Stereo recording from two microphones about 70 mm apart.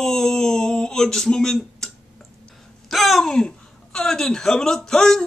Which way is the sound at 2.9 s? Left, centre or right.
Centre.